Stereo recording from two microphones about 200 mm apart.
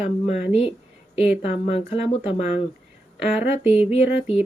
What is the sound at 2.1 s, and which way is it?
Speech, 30° left (ahead or behind).